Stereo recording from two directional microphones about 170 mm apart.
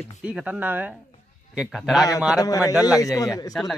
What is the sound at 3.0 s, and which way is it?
Speech, 20° left (ahead or behind).